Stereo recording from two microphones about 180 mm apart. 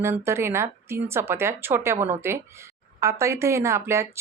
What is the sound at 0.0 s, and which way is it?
Speech, 15° right (ahead or behind).